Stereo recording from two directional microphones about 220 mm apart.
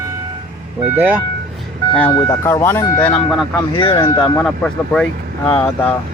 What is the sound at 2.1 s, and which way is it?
Speech, 10° left (ahead or behind).